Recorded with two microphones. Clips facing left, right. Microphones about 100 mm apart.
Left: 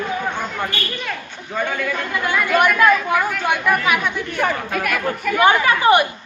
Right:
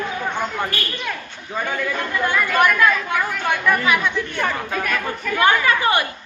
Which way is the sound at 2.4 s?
10° left (ahead or behind).